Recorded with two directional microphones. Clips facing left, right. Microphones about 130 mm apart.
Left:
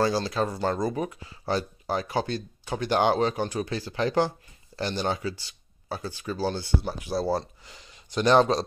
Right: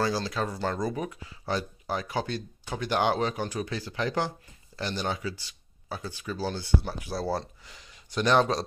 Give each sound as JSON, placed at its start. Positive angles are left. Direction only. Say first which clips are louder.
{"t": 0.0, "sound": "speech", "louder": "left 4 dB", "side_deg": 30}
{"t": 6.8, "sound": "speech", "louder": "left 4 dB", "side_deg": 20}